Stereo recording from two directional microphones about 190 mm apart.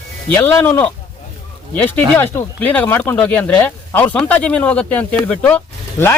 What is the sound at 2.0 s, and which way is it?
Speech, 10° left (ahead or behind).